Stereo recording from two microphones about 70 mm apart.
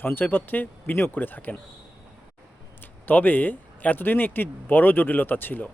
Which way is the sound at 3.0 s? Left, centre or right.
Left.